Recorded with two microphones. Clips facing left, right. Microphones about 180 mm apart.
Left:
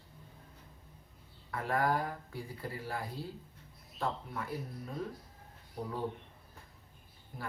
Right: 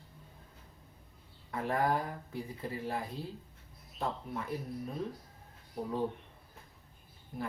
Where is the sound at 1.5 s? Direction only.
20° right (ahead or behind).